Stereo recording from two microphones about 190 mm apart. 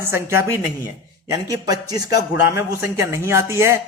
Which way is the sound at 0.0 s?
15° right (ahead or behind).